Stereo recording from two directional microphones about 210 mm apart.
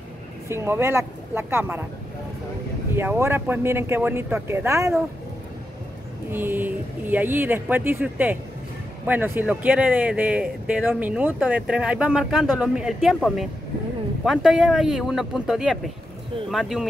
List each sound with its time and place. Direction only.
0.5 s speech: 10° right (ahead or behind)
3.0 s speech: 10° right (ahead or behind)
6.3 s speech: 10° right (ahead or behind)